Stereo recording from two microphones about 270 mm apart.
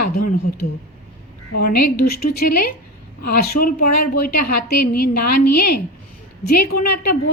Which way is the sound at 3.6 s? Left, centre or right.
Left.